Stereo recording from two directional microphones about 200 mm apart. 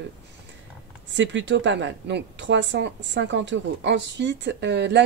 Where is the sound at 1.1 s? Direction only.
65° right (ahead or behind).